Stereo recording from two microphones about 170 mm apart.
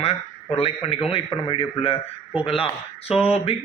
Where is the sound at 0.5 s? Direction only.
35° left (ahead or behind).